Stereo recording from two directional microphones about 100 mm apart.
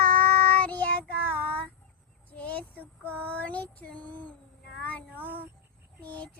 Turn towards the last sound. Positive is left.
turn(degrees=15)  # may be behind; listen again after turning